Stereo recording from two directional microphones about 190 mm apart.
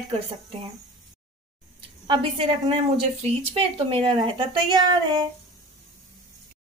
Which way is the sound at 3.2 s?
30° right (ahead or behind).